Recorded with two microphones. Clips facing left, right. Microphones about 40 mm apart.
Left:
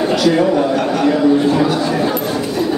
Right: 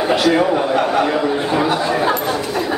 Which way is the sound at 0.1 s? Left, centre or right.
Centre.